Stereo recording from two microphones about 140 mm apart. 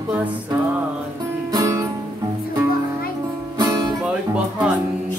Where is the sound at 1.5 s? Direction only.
25° right (ahead or behind).